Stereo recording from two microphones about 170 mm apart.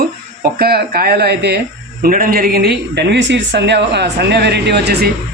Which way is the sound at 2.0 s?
55° right (ahead or behind).